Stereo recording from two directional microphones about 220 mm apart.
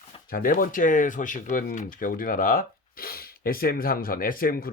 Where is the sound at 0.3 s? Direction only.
40° left (ahead or behind).